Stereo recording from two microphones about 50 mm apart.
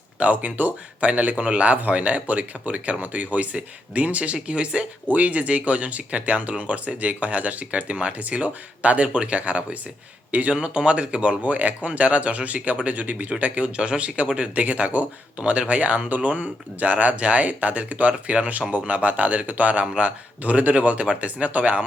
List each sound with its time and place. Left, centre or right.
0.2 s speech: right